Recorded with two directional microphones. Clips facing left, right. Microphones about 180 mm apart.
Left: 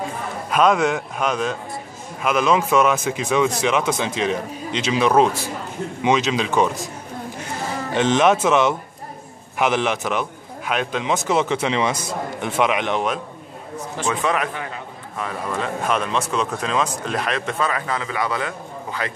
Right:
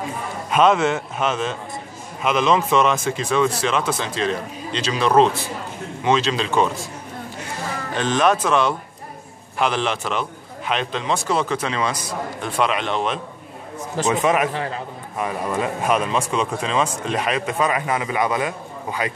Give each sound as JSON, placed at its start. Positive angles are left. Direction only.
{"t": 0.6, "sound": "a man's voice", "side_deg": 0}
{"t": 2.2, "sound": "a man's voice", "side_deg": 5}
{"t": 7.9, "sound": "a man's voice", "side_deg": 20}
{"t": 14.0, "sound": "a man's voice", "side_deg": -20}
{"t": 14.5, "sound": "a man's voice", "side_deg": -35}
{"t": 15.1, "sound": "a man's voice", "side_deg": -15}